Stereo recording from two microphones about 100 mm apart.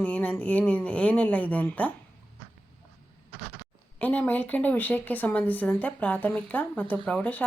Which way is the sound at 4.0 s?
15° left (ahead or behind).